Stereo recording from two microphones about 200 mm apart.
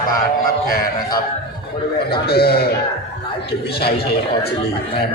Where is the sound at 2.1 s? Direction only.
50° left (ahead or behind).